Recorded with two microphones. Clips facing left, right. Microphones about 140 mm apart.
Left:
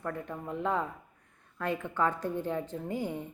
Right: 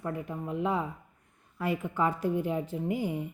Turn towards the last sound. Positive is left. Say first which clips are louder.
# right 3 dB
turn(degrees=-10)  # may be behind; listen again after turning